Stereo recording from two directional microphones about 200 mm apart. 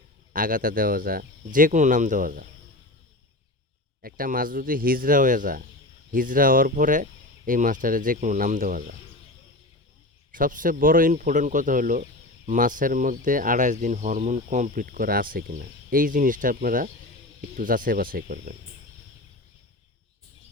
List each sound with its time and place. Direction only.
0.3 s speech: 45° right (ahead or behind)
4.0 s speech: 45° right (ahead or behind)
10.3 s speech: 40° right (ahead or behind)